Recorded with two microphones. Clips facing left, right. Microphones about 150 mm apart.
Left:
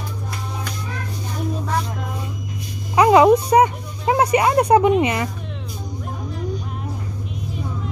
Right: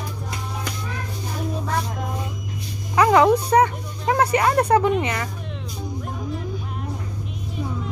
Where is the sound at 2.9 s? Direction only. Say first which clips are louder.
Left 3 dB; 20° left (ahead or behind).